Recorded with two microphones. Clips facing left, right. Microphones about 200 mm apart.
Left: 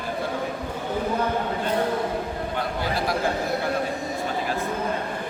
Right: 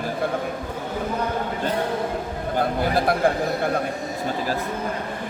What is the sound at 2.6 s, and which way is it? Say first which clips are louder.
Speech: right 7 dB; 55° right (ahead or behind).